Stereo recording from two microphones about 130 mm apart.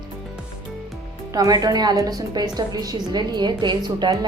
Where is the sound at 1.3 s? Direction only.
30° right (ahead or behind).